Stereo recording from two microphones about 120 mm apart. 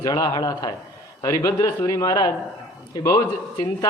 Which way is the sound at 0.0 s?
30° left (ahead or behind).